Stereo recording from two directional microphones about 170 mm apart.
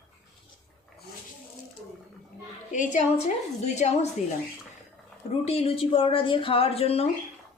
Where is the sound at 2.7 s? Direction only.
45° left (ahead or behind).